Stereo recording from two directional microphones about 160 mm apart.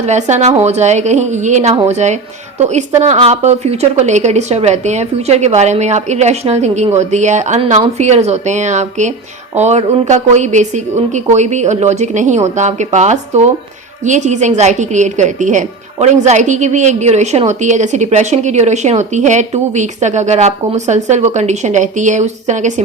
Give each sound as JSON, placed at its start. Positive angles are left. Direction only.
{"t": 0.0, "sound": "a woman's voice", "side_deg": -45}